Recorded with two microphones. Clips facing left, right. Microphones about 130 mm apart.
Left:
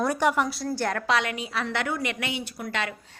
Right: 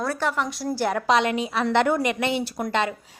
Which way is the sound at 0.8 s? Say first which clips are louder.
Right 5 dB; 10° right (ahead or behind).